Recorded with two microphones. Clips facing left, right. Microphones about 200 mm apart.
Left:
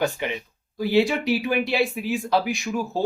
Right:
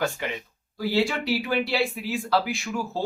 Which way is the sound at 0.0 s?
15° left (ahead or behind).